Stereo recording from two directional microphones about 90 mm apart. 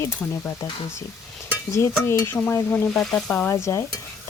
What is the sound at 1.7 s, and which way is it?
Stir, 30° left (ahead or behind).